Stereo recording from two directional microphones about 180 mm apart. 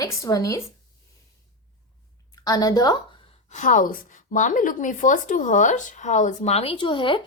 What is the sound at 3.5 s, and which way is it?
A woman's voice, 45° left (ahead or behind).